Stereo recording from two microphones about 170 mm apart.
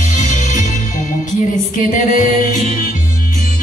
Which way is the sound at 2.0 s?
50° left (ahead or behind).